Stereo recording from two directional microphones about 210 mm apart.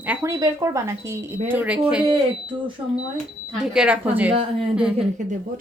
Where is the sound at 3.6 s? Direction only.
5° right (ahead or behind).